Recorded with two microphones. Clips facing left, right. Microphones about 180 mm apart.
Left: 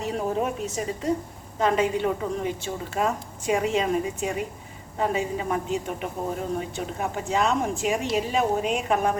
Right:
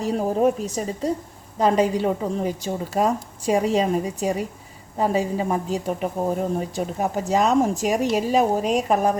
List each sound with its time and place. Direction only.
0.0 s a woman's voice: 35° right (ahead or behind)